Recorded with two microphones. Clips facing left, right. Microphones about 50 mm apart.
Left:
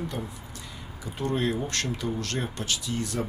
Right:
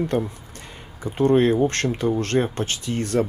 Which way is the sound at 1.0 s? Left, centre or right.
Right.